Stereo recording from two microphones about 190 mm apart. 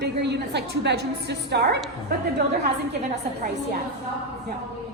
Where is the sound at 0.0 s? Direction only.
65° right (ahead or behind).